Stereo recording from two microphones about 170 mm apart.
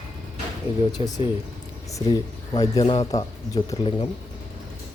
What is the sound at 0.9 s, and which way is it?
Speech, 20° left (ahead or behind).